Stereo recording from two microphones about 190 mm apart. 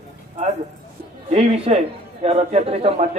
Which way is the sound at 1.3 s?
30° right (ahead or behind).